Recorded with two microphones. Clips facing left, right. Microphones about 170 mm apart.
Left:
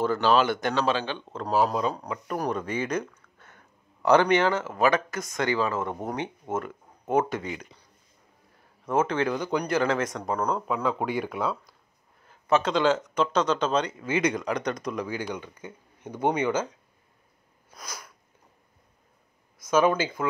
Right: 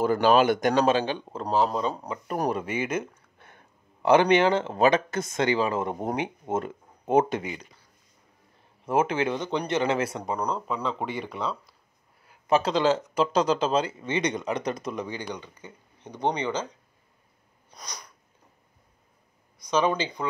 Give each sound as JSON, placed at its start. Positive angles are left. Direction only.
{"t": 0.0, "sound": "speech", "side_deg": -15}
{"t": 1.5, "sound": "speech", "side_deg": 10}
{"t": 2.0, "sound": "speech", "side_deg": -30}
{"t": 8.9, "sound": "speech", "side_deg": -10}
{"t": 9.2, "sound": "speech", "side_deg": -25}
{"t": 10.2, "sound": "speech", "side_deg": 0}
{"t": 12.7, "sound": "speech", "side_deg": 0}
{"t": 13.2, "sound": "speech", "side_deg": -35}
{"t": 13.7, "sound": "speech", "side_deg": -5}
{"t": 17.6, "sound": "sneeze", "side_deg": 5}
{"t": 19.7, "sound": "speech", "side_deg": 5}